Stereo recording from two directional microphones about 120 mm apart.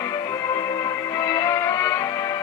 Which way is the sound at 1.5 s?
25° left (ahead or behind).